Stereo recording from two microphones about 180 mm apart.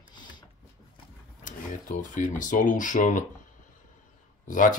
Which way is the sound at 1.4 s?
45° left (ahead or behind).